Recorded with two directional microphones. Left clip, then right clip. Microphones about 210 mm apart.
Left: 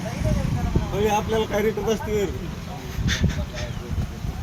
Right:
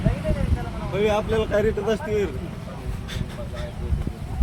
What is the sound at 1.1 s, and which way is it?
Speech, 40° left (ahead or behind).